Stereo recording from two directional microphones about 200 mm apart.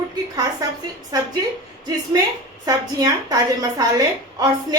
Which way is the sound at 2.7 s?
20° right (ahead or behind).